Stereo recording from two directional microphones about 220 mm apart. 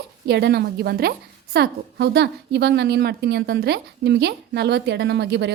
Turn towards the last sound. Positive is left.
turn(degrees=-50)  # may be behind; listen again after turning